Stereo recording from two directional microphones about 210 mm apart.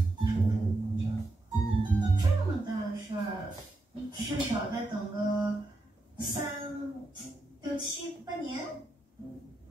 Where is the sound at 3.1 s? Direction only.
25° right (ahead or behind).